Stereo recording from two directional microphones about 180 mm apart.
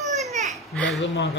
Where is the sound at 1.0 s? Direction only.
85° left.